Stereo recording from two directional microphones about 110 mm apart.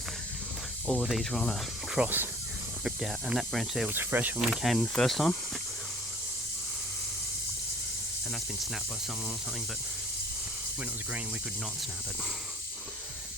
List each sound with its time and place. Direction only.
0.9 s speech: centre (ahead or behind)
2.0 s speech: 15° right (ahead or behind)
2.8 s speech: 5° right (ahead or behind)
3.8 s speech: 15° right (ahead or behind)
4.4 s speech: centre (ahead or behind)